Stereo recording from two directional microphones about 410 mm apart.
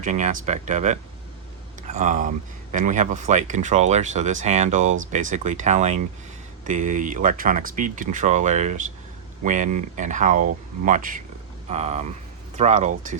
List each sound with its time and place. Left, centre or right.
0.0 s speech: centre